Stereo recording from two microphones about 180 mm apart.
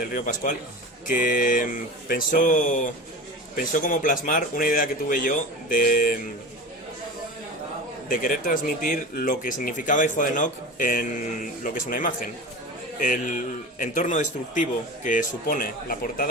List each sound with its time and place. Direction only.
0.0 s a man's voice: 50° left (ahead or behind)
8.0 s a man's voice: 50° left (ahead or behind)